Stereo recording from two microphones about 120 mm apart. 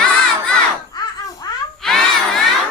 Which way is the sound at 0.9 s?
35° left (ahead or behind).